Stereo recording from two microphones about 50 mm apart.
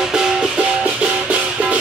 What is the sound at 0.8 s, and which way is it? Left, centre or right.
Music, right.